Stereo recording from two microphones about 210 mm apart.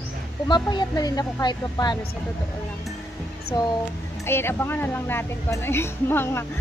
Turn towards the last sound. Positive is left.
turn(degrees=10)  # may be behind; listen again after turning